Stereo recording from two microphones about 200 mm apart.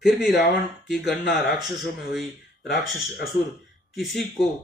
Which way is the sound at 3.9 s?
Centre (ahead or behind).